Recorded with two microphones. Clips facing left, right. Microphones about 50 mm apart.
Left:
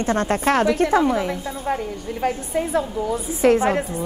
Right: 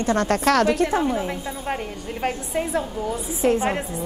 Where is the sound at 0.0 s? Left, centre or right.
Left.